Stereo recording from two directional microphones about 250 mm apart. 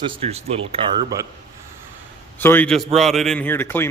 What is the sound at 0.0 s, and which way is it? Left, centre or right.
Speech, right.